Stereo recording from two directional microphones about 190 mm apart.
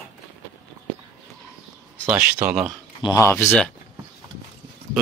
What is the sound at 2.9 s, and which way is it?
Speech, 20° left (ahead or behind).